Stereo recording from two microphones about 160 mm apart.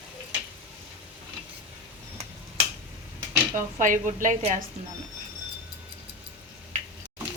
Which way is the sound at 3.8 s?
55° right (ahead or behind).